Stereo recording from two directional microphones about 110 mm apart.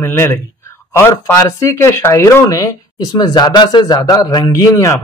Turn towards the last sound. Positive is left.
turn(degrees=25)  # may be behind; listen again after turning